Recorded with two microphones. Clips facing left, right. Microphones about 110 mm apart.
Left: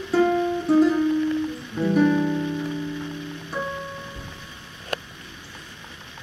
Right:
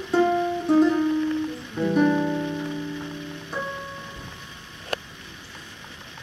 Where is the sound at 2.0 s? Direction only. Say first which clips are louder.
Left 1 dB; 20° right (ahead or behind).